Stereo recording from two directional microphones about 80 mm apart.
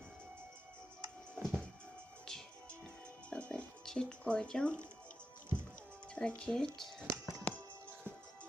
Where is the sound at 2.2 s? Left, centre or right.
Centre.